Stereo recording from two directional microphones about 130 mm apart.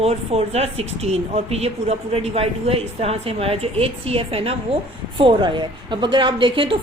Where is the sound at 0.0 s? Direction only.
50° right (ahead or behind).